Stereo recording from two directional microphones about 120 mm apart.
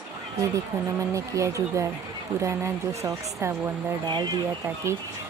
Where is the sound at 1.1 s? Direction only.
25° right (ahead or behind).